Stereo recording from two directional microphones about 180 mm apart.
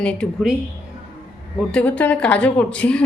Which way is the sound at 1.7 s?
5° left (ahead or behind).